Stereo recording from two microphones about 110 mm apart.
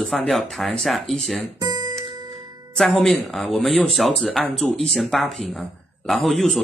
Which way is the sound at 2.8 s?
Centre (ahead or behind).